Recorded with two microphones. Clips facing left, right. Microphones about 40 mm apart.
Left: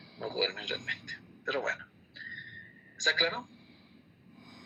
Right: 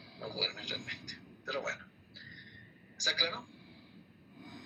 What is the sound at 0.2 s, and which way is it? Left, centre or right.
A man's voice, left.